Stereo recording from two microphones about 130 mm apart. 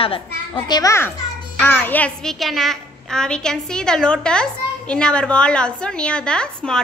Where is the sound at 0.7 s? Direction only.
25° left (ahead or behind).